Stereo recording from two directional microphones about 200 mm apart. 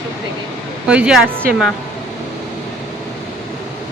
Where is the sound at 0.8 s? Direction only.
5° right (ahead or behind).